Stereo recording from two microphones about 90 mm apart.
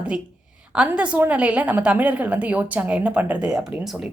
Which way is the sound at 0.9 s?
15° right (ahead or behind).